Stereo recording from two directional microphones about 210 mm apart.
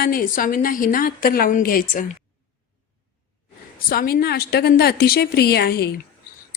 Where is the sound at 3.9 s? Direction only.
45° left (ahead or behind).